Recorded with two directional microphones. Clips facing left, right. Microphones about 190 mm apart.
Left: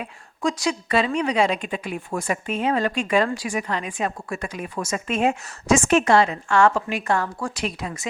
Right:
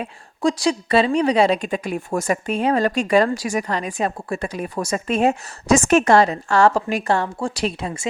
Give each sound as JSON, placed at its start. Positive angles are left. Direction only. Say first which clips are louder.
{"t": 0.0, "sound": "a woman's voice", "louder": "right 4 dB", "side_deg": -30}